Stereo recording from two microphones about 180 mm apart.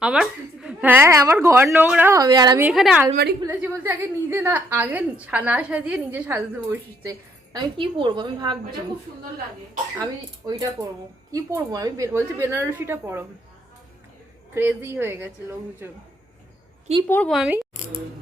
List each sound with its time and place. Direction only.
0.0 s a woman's voice: 5° right (ahead or behind); by 2.6 s 20° right (ahead or behind)
2.6 s a woman's voice: 5° right (ahead or behind); by 8.5 s 25° right (ahead or behind)
10.4 s a woman's voice: 20° right (ahead or behind)
14.5 s a woman's voice: 10° right (ahead or behind)
17.1 s speech: 5° left (ahead or behind)